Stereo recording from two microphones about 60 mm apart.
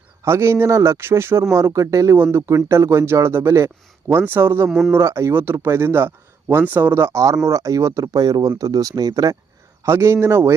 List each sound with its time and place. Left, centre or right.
0.3 s speech: right
1.5 s speech: right
2.1 s speech: right
2.5 s speech: right
4.1 s speech: right
9.8 s speech: right